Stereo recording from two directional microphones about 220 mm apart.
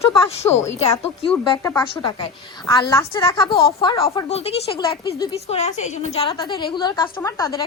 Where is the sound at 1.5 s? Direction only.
20° left (ahead or behind).